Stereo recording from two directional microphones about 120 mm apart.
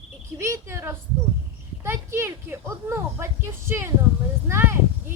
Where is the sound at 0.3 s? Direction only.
25° right (ahead or behind).